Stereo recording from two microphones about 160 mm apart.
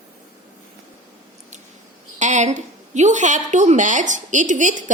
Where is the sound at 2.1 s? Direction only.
50° right (ahead or behind).